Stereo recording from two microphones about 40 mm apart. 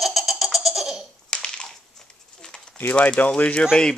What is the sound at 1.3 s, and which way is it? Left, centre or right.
Crumpling, left.